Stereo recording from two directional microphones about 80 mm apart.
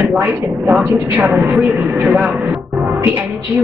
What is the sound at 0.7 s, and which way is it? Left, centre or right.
Speech, centre.